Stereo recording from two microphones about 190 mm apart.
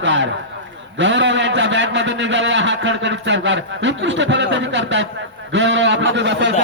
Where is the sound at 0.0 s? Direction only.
80° right.